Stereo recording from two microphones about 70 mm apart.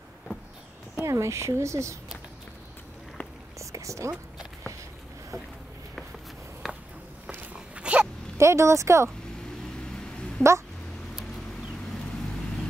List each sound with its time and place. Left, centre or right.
1.0 s speech: right
3.5 s a sound: right
6.6 s walk: centre
7.2 s a sound: centre
8.4 s speech: right
10.4 s speech: centre